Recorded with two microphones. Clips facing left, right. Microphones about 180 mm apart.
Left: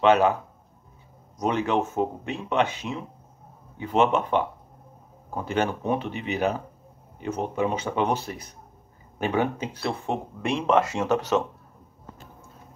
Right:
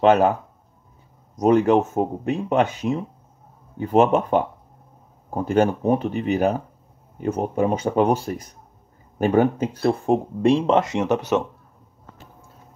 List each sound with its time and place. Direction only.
0.0 s speech: 45° right (ahead or behind)
1.4 s speech: 45° right (ahead or behind)
10.8 s speech: 20° right (ahead or behind)